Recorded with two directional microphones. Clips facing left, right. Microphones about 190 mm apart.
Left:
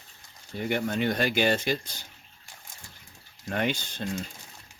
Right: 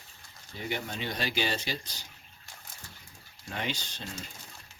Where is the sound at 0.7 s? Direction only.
55° left (ahead or behind).